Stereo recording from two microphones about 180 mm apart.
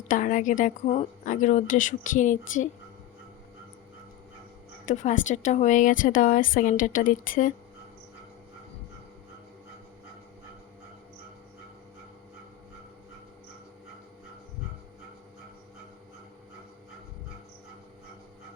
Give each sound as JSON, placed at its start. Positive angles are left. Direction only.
{"t": 0.1, "sound": "a woman's voice", "side_deg": 45}
{"t": 4.9, "sound": "a woman's voice", "side_deg": 45}